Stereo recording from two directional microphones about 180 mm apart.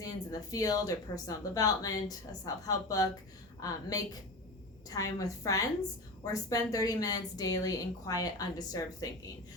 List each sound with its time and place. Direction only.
0.0 s a woman's voice: 20° left (ahead or behind)